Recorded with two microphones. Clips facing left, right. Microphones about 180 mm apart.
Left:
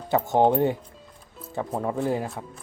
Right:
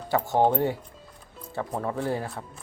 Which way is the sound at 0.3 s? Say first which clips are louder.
Left 3 dB; 20° left (ahead or behind).